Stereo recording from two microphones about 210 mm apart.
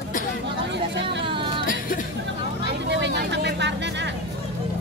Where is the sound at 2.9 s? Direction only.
55° right (ahead or behind).